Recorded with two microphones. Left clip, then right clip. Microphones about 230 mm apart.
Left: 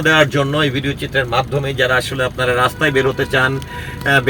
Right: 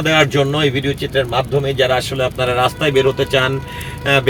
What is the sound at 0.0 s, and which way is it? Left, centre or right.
Speech, centre.